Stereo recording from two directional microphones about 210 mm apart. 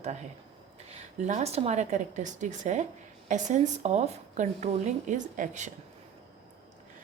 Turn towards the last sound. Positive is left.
turn(degrees=-35)  # may be behind; listen again after turning